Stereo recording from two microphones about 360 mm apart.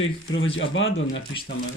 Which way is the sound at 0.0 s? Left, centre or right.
Left.